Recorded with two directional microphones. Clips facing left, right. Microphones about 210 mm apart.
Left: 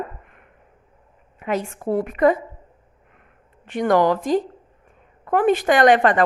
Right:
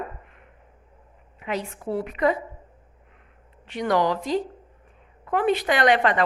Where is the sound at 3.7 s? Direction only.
50° left (ahead or behind).